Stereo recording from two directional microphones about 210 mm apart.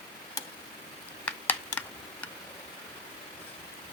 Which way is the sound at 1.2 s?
5° left (ahead or behind).